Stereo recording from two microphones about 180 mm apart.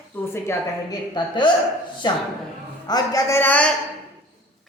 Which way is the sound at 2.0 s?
25° left (ahead or behind).